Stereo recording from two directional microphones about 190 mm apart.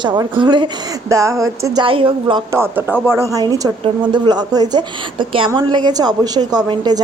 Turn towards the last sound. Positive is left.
turn(degrees=-20)  # may be behind; listen again after turning